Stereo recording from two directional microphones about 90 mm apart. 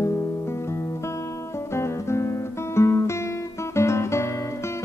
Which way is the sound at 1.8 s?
30° left (ahead or behind).